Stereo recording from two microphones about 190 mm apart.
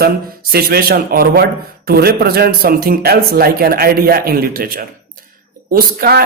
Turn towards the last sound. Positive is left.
turn(degrees=-55)  # may be behind; listen again after turning